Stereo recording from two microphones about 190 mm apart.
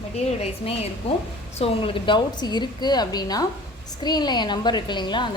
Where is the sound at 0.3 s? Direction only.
35° left (ahead or behind).